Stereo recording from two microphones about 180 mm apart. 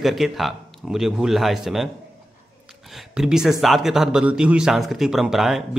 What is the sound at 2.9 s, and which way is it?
Speech, 5° right (ahead or behind).